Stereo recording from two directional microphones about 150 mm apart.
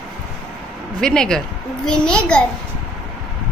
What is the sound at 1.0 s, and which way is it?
A child's voice, 5° left (ahead or behind).